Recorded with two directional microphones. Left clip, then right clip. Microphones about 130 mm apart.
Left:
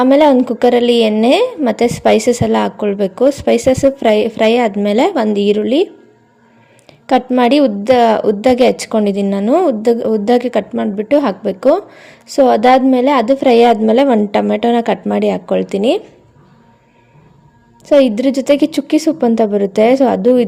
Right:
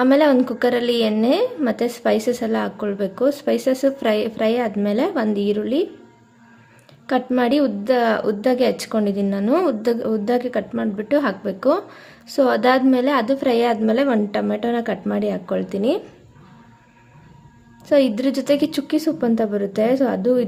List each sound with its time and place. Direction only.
0.0 s a woman's voice: 40° left (ahead or behind)
7.3 s a woman's voice: 40° left (ahead or behind)
9.3 s a woman's voice: 30° left (ahead or behind)
17.8 s a woman's voice: 35° left (ahead or behind)